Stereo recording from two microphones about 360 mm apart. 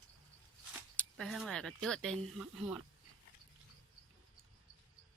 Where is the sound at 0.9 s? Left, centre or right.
Centre.